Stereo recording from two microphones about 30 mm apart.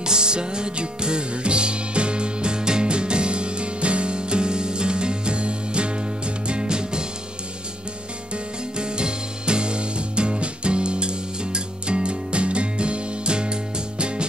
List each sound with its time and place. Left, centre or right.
0.0 s music: right
8.7 s music: right